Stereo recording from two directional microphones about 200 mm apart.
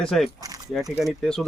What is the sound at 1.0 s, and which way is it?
Speech, centre (ahead or behind).